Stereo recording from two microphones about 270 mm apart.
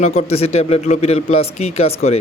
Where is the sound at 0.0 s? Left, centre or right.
Left.